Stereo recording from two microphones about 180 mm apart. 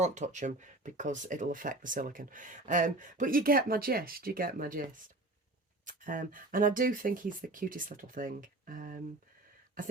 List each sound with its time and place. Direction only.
0.0 s speech: 40° right (ahead or behind)
5.8 s speech: 50° right (ahead or behind)